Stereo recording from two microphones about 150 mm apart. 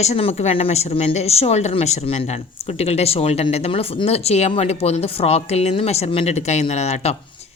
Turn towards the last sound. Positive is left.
turn(degrees=45)  # may be behind; listen again after turning